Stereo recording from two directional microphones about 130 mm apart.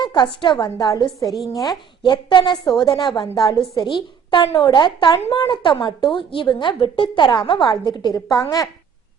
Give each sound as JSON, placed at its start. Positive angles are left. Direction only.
{"t": 0.0, "sound": "a woman's voice", "side_deg": 35}
{"t": 2.0, "sound": "a woman's voice", "side_deg": 35}